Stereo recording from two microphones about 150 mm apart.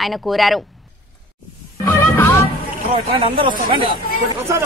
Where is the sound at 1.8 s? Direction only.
15° left (ahead or behind).